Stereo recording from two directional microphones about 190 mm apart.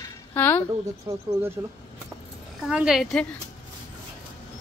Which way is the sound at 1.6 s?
10° right (ahead or behind).